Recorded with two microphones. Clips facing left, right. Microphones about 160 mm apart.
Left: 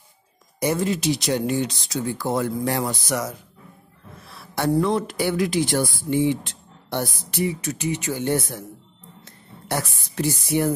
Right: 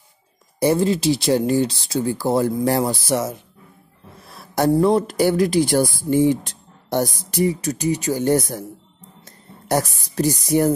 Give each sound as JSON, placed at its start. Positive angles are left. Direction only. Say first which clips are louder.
{"t": 0.6, "sound": "speech", "louder": "right 5 dB", "side_deg": -30}
{"t": 4.3, "sound": "a woman's voice", "louder": "right 5 dB", "side_deg": -40}